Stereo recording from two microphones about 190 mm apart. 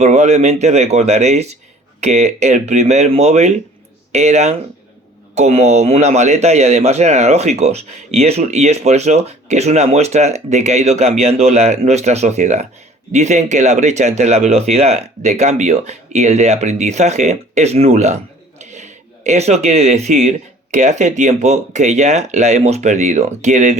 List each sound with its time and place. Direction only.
0.0 s a man's voice: 35° right (ahead or behind)